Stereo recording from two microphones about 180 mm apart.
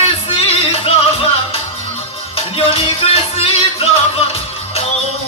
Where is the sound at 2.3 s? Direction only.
30° left (ahead or behind).